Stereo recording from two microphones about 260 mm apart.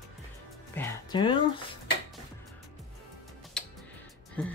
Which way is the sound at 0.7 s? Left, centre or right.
Centre.